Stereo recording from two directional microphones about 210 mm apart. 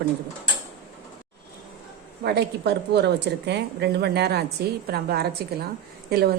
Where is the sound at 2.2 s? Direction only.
50° right (ahead or behind).